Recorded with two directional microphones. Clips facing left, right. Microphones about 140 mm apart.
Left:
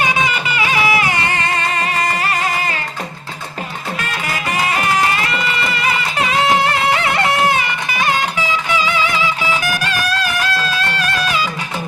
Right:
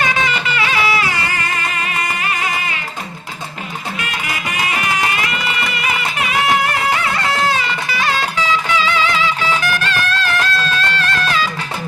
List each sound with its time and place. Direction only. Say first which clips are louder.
0.0 s music: left 1 dB; 15° left (ahead or behind); by 2.8 s 40° left (ahead or behind)
5.8 s music: left 3 dB; 30° left (ahead or behind); by 11.4 s 15° left (ahead or behind)